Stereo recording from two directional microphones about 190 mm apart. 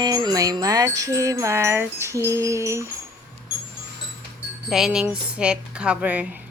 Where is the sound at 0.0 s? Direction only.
20° right (ahead or behind).